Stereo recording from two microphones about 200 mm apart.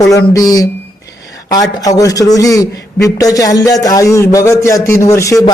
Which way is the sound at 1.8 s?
15° left (ahead or behind).